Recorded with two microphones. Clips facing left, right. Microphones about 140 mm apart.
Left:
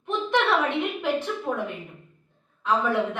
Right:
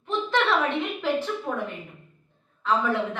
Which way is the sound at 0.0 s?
15° left (ahead or behind).